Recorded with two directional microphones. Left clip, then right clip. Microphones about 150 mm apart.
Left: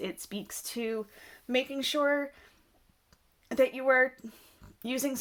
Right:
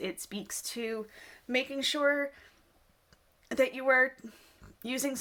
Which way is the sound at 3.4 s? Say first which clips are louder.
Left 2 dB; 25° left (ahead or behind).